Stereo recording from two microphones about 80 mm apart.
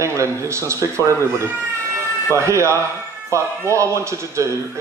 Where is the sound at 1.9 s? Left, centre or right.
Right.